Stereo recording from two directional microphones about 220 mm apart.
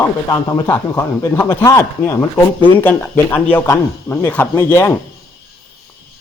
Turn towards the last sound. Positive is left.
turn(degrees=10)  # may be behind; listen again after turning